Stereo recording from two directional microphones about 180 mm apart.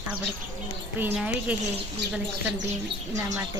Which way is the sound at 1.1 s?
5° right (ahead or behind).